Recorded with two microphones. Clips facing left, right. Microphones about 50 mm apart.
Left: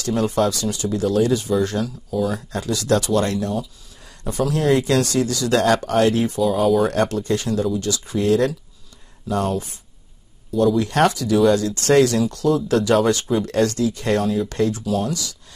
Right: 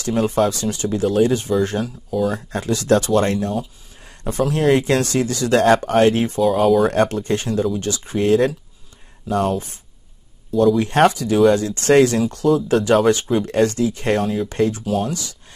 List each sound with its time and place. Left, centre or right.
0.0 s speech: right
6.6 s speech: centre
6.9 s speech: right
9.3 s speech: centre
10.5 s speech: centre
10.8 s speech: right
12.4 s speech: centre